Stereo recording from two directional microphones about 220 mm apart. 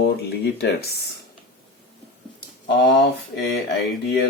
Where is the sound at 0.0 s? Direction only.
50° left (ahead or behind).